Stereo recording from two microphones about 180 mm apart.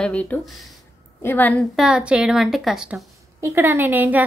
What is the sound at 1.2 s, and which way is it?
Speech, 10° left (ahead or behind).